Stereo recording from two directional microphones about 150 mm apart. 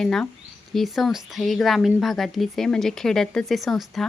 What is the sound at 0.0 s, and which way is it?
A woman's voice, 5° left (ahead or behind).